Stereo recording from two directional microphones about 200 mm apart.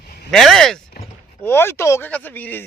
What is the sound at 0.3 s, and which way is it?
Speech, centre (ahead or behind).